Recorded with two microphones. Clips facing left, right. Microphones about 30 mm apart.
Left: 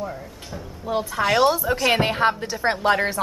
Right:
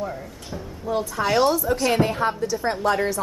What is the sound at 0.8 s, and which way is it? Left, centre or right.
Speech, left.